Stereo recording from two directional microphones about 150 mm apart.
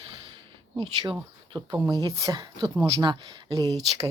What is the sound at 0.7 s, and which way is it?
Speech, 30° right (ahead or behind).